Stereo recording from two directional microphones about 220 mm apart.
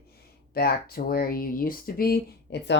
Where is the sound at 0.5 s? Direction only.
45° left (ahead or behind).